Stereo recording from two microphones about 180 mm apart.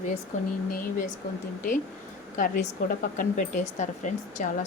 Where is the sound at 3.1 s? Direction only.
45° left (ahead or behind).